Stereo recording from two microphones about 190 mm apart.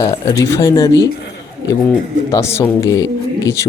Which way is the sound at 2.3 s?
15° left (ahead or behind).